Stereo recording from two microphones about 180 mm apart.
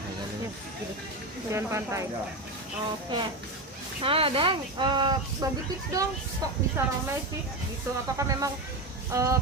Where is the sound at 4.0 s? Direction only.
30° right (ahead or behind).